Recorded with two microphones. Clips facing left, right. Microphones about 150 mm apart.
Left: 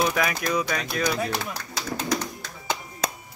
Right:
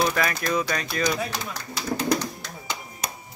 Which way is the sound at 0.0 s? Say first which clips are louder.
Even; 5° left (ahead or behind).